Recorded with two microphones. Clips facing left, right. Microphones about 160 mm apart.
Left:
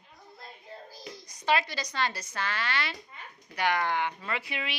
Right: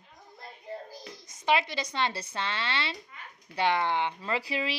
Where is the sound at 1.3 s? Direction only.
20° right (ahead or behind).